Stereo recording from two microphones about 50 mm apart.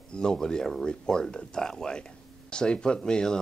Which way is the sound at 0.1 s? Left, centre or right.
Centre.